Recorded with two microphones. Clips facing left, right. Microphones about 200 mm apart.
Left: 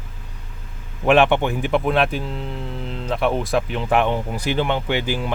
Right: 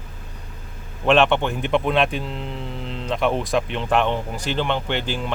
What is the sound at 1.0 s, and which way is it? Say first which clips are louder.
Speech: left 2 dB; 10° left (ahead or behind).